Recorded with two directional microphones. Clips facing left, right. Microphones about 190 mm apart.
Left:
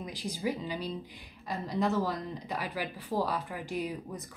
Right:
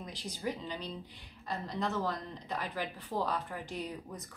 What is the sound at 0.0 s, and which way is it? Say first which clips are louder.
A woman's voice: left 4 dB; 10° left (ahead or behind).